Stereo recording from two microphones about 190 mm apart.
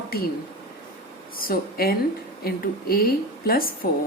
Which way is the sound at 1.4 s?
50° left (ahead or behind).